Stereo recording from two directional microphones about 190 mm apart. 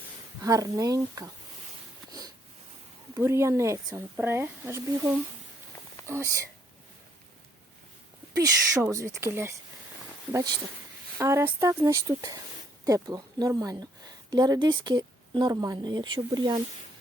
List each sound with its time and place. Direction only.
0.4 s speech: 20° right (ahead or behind)
2.0 s sniff: 20° right (ahead or behind)
3.2 s speech: 15° right (ahead or behind)
6.1 s speech: 15° right (ahead or behind)
8.4 s speech: 15° right (ahead or behind)